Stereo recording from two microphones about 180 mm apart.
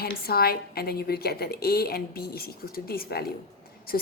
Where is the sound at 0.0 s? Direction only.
60° left (ahead or behind).